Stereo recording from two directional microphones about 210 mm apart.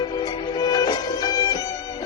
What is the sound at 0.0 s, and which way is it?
Music, 20° left (ahead or behind).